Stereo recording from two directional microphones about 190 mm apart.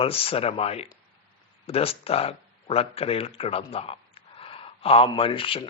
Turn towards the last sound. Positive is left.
turn(degrees=30)  # may be behind; listen again after turning